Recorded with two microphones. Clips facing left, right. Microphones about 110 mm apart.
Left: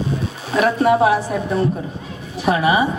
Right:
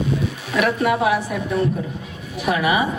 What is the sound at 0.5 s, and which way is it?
A woman's voice, 30° left (ahead or behind).